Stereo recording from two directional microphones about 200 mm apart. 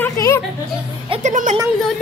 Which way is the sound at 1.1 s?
35° right (ahead or behind).